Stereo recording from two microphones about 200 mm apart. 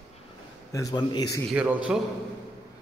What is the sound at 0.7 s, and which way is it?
Mantra, 15° left (ahead or behind).